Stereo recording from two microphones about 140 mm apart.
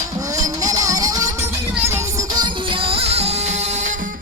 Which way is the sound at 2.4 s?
40° right (ahead or behind).